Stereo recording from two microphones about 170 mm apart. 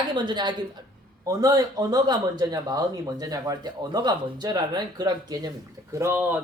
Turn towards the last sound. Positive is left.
turn(degrees=-10)  # may be behind; listen again after turning